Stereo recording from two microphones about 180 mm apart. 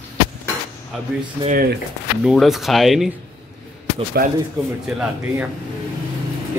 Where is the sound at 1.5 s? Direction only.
55° right (ahead or behind).